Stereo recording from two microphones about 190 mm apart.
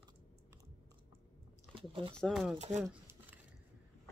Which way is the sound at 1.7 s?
30° right (ahead or behind).